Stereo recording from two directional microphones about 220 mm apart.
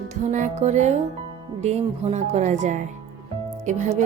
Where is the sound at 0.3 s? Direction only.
35° right (ahead or behind).